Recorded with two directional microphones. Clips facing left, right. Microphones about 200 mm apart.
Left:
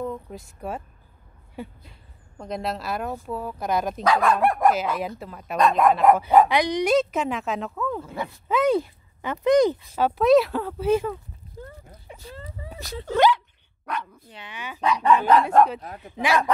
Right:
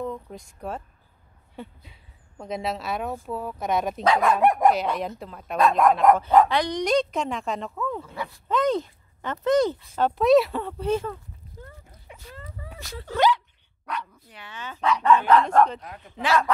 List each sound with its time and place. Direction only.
0.0 s speech: 5° left (ahead or behind)
4.0 s speech: 20° right (ahead or behind)
4.7 s speech: 5° left (ahead or behind)
11.6 s a sound: 35° left (ahead or behind)
13.0 s speech: 55° left (ahead or behind)
14.3 s speech: 15° left (ahead or behind)